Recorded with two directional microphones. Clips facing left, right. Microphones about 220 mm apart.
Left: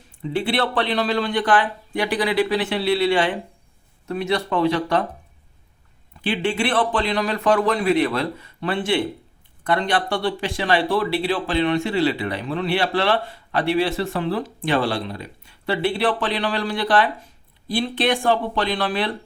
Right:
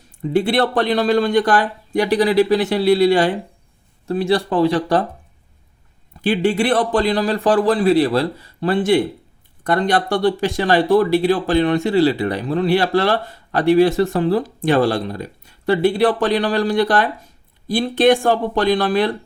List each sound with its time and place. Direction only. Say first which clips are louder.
0.2 s speech: right 5 dB; 45° right (ahead or behind)
6.2 s speech: right 6 dB; 40° right (ahead or behind)